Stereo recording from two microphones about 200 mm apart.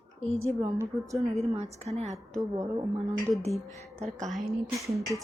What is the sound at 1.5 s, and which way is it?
Speech, 30° right (ahead or behind).